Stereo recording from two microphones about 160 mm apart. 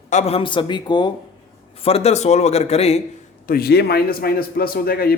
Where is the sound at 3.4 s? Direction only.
70° left (ahead or behind).